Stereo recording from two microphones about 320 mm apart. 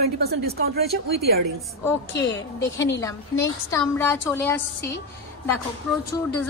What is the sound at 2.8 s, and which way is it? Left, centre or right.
Speech, centre.